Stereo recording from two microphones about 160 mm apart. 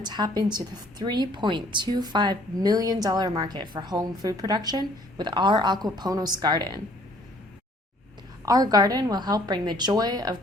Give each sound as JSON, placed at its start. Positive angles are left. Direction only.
{"t": 0.0, "sound": "a woman's voice", "side_deg": -25}
{"t": 8.4, "sound": "a woman's voice", "side_deg": -25}